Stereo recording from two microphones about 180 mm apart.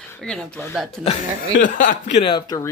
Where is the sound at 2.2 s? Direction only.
25° left (ahead or behind).